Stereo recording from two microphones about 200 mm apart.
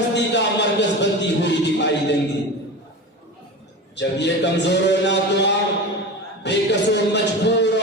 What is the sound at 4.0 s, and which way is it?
A man's voice, 60° left (ahead or behind).